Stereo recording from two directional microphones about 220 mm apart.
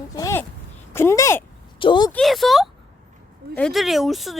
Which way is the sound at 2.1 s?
Centre (ahead or behind).